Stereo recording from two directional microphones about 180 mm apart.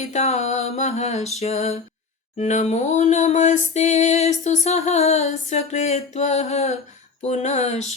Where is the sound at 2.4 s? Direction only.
40° left (ahead or behind).